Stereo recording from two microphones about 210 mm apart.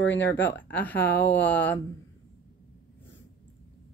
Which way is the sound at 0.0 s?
60° left (ahead or behind).